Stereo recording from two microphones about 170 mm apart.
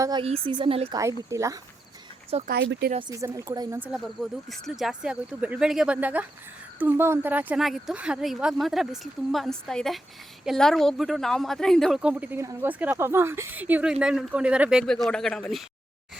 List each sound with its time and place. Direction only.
0.0 s speech: 25° right (ahead or behind)
1.3 s speech: 15° right (ahead or behind)
2.5 s speech: 80° right
3.1 s speech: 20° right (ahead or behind)
3.8 s speech: centre (ahead or behind)